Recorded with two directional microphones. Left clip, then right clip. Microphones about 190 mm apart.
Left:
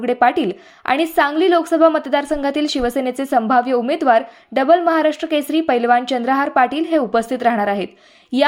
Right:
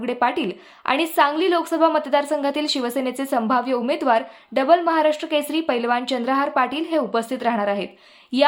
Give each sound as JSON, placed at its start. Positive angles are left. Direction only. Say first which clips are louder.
{"t": 0.0, "sound": "a woman's voice", "louder": "left 6 dB", "side_deg": 20}